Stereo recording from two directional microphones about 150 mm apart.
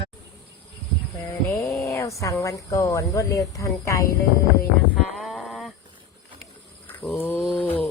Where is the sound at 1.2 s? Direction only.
20° left (ahead or behind).